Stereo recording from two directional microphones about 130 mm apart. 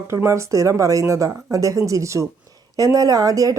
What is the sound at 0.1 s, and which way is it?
A woman's voice, 20° right (ahead or behind).